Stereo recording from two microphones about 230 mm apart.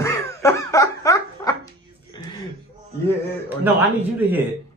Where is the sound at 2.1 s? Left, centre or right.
Centre.